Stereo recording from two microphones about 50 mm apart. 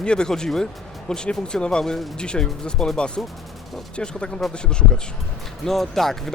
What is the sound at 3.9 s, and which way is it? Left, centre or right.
Speech, centre.